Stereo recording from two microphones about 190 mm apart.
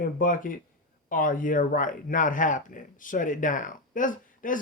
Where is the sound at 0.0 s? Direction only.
45° left (ahead or behind).